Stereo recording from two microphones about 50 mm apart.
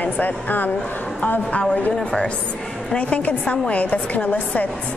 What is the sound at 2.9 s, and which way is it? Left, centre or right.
A woman's voice, left.